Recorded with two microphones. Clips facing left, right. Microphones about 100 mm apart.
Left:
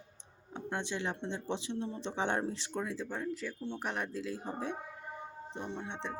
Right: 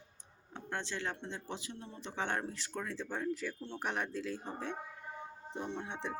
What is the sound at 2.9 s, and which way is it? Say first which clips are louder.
Speech: even; centre (ahead or behind).